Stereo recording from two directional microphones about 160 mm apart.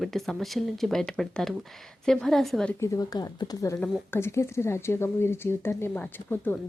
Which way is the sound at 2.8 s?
20° left (ahead or behind).